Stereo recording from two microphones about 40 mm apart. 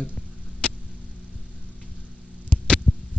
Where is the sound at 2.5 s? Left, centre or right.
Left.